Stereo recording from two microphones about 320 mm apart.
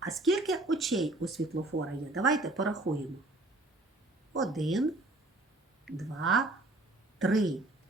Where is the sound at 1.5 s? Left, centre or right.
Right.